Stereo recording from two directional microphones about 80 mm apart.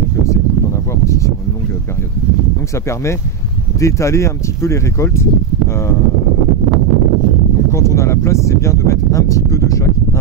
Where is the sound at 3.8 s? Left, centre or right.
Left.